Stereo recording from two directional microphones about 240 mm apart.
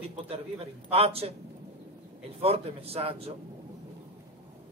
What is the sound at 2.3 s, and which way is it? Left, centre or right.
Speech, right.